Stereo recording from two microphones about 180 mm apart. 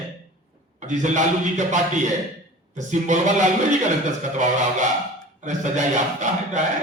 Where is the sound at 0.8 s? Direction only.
40° right (ahead or behind).